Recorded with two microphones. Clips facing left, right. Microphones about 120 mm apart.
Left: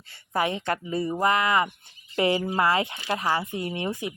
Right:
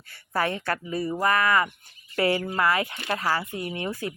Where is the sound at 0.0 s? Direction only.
25° left (ahead or behind).